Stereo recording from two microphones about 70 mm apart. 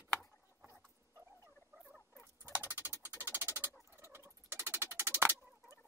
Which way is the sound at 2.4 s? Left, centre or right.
Right.